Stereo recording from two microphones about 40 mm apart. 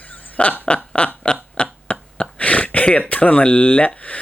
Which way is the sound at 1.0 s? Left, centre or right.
Left.